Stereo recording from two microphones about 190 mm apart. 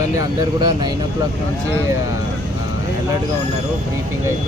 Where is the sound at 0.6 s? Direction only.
20° right (ahead or behind).